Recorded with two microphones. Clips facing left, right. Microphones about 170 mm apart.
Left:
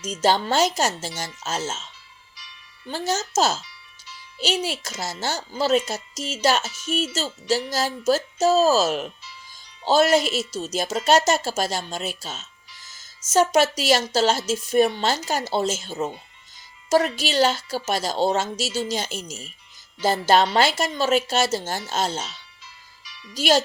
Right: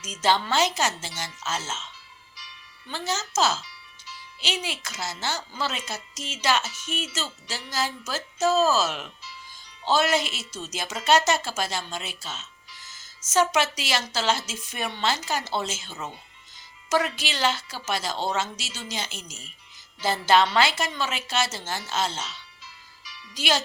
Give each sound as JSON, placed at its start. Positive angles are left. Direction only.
{"t": 0.0, "sound": "a woman's voice", "side_deg": 40}